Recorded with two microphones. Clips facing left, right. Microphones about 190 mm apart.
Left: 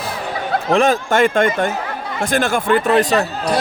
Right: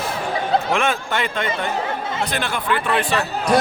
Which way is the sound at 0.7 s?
35° left (ahead or behind).